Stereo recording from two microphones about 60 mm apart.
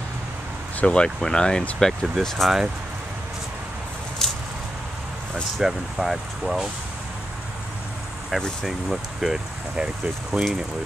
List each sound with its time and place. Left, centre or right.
0.7 s speech: centre
1.8 s speech: centre
4.2 s a sound: centre
5.3 s speech: centre
8.3 s speech: centre
10.3 s speech: right